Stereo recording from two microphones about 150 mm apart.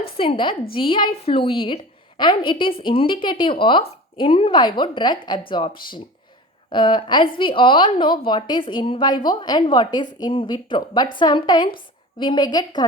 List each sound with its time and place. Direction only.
0.0 s a woman's voice: 35° left (ahead or behind)